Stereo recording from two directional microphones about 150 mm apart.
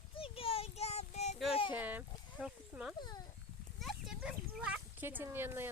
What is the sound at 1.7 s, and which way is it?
Speech, 10° right (ahead or behind).